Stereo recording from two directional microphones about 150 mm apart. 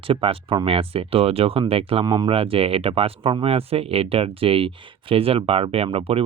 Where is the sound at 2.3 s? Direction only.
40° right (ahead or behind).